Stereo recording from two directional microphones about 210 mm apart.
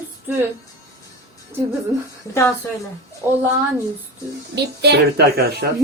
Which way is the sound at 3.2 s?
10° right (ahead or behind).